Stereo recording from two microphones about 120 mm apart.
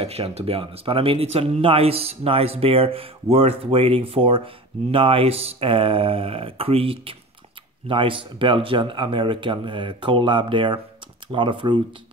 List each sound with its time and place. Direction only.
0.0 s speech: 60° right (ahead or behind); by 11.8 s 40° right (ahead or behind)